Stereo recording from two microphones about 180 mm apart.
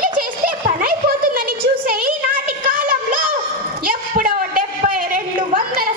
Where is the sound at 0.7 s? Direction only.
50° right (ahead or behind).